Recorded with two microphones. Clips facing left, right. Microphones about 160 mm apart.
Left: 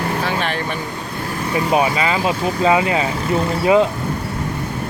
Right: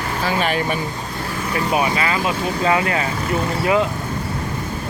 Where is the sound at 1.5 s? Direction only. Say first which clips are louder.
Left 3 dB; 25° left (ahead or behind).